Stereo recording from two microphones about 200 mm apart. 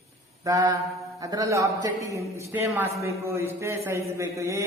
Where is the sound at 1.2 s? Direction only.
20° right (ahead or behind).